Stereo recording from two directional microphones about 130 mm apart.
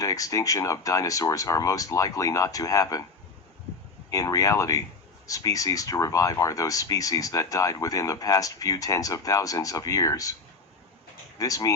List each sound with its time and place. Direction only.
0.0 s speech: 25° left (ahead or behind)
4.1 s speech: 25° left (ahead or behind)
11.3 s speech: 25° left (ahead or behind)